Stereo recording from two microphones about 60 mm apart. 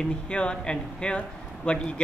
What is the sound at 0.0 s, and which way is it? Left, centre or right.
A man's voice, centre.